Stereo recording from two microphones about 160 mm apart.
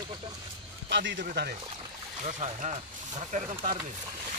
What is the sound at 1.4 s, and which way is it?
Speech, 90° right.